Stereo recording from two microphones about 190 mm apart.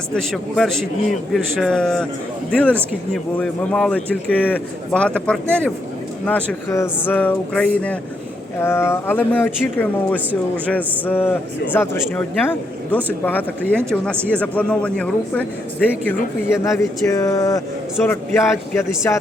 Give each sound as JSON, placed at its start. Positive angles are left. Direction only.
{"t": 0.1, "sound": "a man's voice", "side_deg": 0}
{"t": 16.7, "sound": "a man's voice", "side_deg": 15}